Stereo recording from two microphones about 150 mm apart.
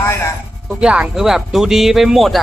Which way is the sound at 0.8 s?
5° right (ahead or behind).